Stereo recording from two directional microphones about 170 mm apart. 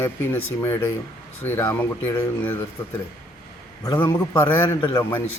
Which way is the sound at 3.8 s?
15° left (ahead or behind).